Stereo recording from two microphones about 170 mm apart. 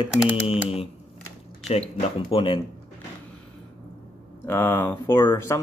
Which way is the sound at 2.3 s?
30° left (ahead or behind).